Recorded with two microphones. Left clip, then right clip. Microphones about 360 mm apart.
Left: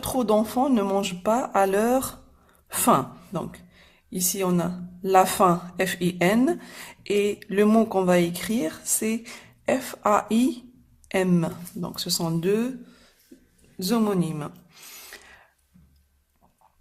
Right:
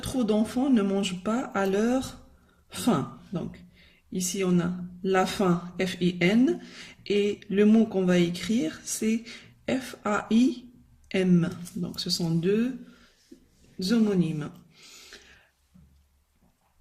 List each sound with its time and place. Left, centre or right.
0.0 s speech: centre
13.7 s speech: centre